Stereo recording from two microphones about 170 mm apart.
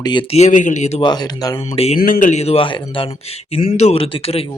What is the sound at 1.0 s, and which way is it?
Speech, 25° left (ahead or behind).